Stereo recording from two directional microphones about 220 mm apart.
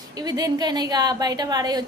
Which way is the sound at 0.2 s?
15° right (ahead or behind).